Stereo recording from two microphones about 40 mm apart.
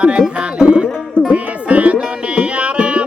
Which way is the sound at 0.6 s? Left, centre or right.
Right.